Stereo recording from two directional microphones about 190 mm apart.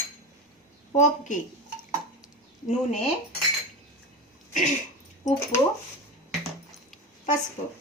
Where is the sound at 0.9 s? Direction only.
40° left (ahead or behind).